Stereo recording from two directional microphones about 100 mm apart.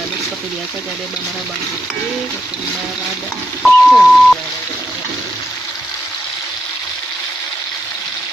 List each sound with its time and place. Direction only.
3.6 s speech: centre (ahead or behind)